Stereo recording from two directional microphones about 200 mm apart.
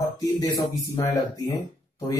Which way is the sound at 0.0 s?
15° left (ahead or behind).